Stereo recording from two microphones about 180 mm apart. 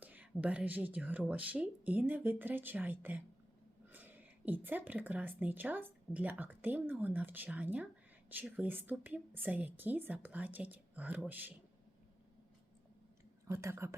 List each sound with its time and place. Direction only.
0.0 s a woman's voice: 10° right (ahead or behind)
13.5 s a woman's voice: 15° right (ahead or behind)